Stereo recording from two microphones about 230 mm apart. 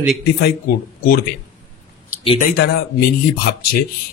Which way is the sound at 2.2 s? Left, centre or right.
Left.